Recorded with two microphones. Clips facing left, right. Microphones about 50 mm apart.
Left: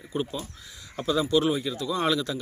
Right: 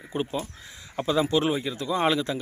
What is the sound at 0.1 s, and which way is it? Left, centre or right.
Speech, right.